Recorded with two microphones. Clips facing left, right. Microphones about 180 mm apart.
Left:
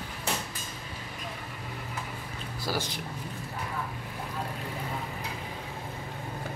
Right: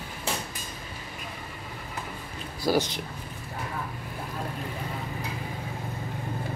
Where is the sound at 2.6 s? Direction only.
15° right (ahead or behind).